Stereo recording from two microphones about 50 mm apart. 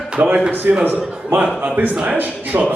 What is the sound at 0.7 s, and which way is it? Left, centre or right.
A man's voice, right.